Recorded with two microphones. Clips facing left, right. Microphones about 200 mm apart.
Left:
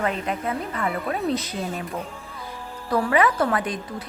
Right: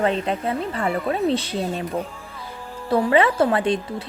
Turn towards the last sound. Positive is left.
turn(degrees=-30)  # may be behind; listen again after turning